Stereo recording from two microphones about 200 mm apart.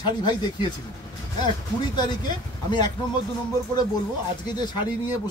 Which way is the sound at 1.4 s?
20° left (ahead or behind).